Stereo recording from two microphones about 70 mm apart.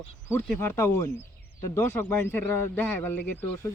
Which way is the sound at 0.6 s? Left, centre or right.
Left.